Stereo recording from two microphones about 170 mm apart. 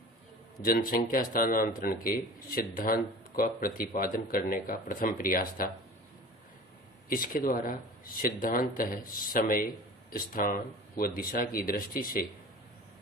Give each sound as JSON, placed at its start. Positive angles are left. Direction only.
{"t": 0.6, "sound": "speech", "side_deg": 55}
{"t": 7.1, "sound": "speech", "side_deg": 55}